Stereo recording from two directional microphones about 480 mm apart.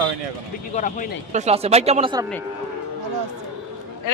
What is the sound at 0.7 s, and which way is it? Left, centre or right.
Speech, centre.